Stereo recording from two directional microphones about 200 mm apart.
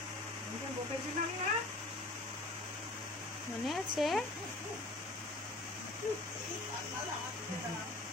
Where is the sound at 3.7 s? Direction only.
Centre (ahead or behind).